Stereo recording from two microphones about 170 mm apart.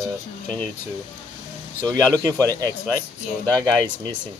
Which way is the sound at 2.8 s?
10° left (ahead or behind).